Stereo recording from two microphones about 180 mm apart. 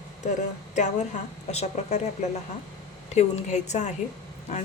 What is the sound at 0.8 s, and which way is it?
A woman's voice, 40° left (ahead or behind).